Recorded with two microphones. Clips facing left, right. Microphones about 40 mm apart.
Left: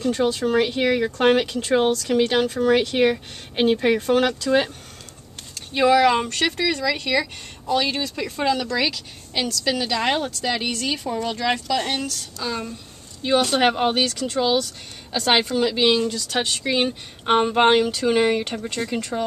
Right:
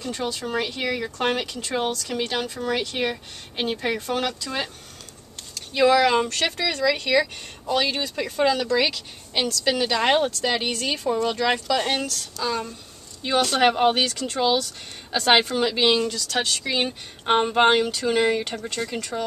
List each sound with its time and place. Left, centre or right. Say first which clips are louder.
0.1 s speech: left 6 dB; left
2.4 s speech: left 7 dB; left
5.8 s a woman's voice: left 1 dB; centre
12.1 s speech: right 1 dB; centre
13.8 s speech: even; centre
16.2 s speech: left 1 dB; centre
17.9 s speech: left 2 dB; centre